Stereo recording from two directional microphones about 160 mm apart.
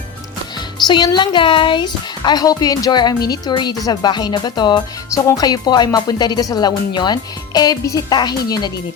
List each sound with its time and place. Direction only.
0.9 s speech: 25° left (ahead or behind)